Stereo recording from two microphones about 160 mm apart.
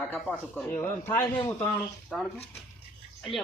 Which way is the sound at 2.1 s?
Centre (ahead or behind).